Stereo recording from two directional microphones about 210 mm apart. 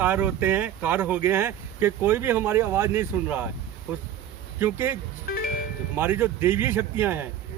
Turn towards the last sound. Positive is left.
turn(degrees=-10)  # may be behind; listen again after turning